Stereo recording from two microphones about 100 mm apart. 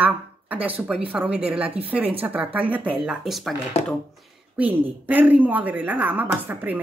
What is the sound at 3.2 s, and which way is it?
Speech, centre (ahead or behind).